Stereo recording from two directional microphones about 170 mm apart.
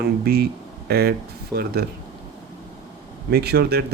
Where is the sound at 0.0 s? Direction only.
70° right (ahead or behind).